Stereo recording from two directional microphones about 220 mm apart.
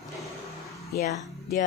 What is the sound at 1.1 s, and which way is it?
Speech, 35° left (ahead or behind).